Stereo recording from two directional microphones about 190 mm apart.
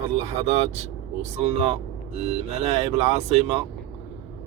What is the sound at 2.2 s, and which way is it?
Speech, 35° right (ahead or behind).